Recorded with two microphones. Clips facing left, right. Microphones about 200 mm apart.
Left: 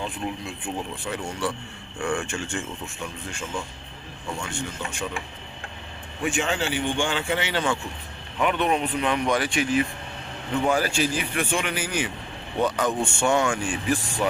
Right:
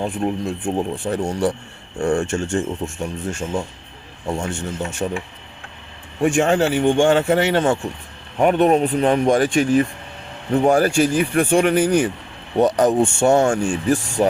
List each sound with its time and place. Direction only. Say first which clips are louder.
0.0 s speech: right 9 dB; 45° right (ahead or behind)
6.2 s speech: right 9 dB; 45° right (ahead or behind)